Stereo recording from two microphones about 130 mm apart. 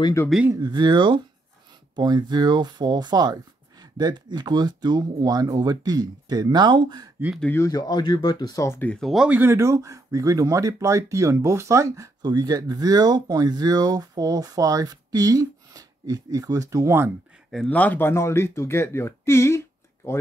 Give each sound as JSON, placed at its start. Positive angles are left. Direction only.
{"t": 0.5, "sound": "speech", "side_deg": -30}
{"t": 7.5, "sound": "speech", "side_deg": 25}
{"t": 8.6, "sound": "speech", "side_deg": 15}
{"t": 8.9, "sound": "speech", "side_deg": 0}
{"t": 9.4, "sound": "speech", "side_deg": -20}
{"t": 17.6, "sound": "speech", "side_deg": 10}